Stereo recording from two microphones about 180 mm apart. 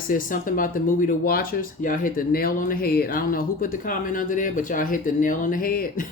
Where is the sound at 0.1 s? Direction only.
50° left (ahead or behind).